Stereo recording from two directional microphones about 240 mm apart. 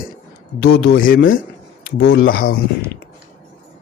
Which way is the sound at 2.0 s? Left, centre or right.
Left.